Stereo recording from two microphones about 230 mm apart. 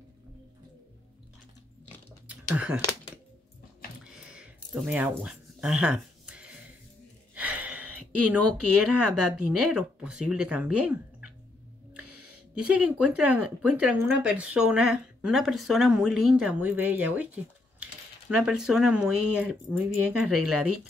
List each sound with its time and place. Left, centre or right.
2.2 s a sound: centre
4.0 s a sound: centre
7.3 s gasp: centre
7.8 s a sound: right
8.4 s speech: right
9.7 s speech: centre
12.0 s music: right
12.6 s speech: centre
18.3 s speech: centre